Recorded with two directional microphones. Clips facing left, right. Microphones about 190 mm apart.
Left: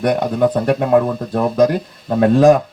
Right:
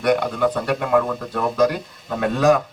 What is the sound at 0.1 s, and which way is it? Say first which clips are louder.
A man's voice: left 1 dB; 35° left (ahead or behind).